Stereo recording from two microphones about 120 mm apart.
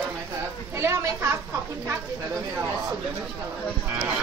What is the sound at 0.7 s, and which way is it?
Speech, 20° right (ahead or behind).